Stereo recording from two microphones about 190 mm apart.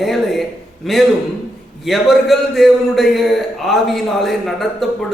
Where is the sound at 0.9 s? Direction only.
Centre (ahead or behind).